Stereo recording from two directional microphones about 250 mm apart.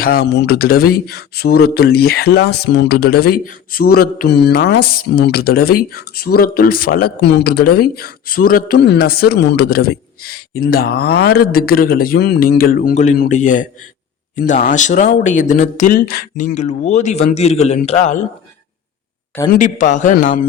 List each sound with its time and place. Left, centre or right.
0.0 s speech: left
19.5 s speech: left